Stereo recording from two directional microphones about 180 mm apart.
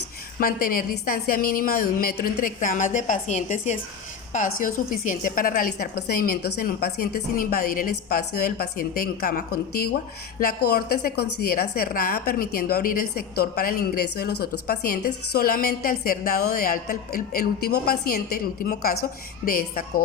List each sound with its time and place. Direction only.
0.3 s a woman's voice: 55° left (ahead or behind)